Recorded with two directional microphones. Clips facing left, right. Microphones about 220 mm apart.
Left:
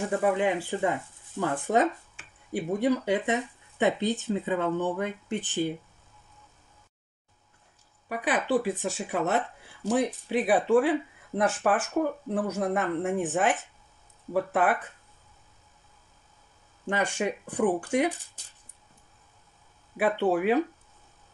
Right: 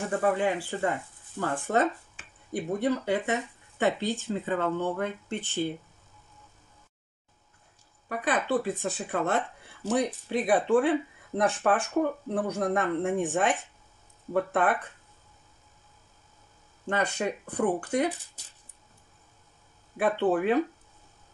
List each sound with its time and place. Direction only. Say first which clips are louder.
0.2 s speech: even; 15° left (ahead or behind)
8.1 s speech: left 1 dB; 10° left (ahead or behind)
16.8 s speech: left 1 dB; 10° left (ahead or behind)
20.0 s speech: even; 10° left (ahead or behind)